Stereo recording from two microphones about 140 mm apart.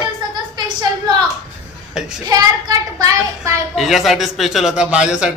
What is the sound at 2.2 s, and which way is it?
Child singing, 25° right (ahead or behind).